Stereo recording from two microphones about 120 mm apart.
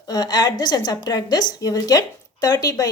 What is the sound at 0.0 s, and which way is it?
Speech, 35° left (ahead or behind).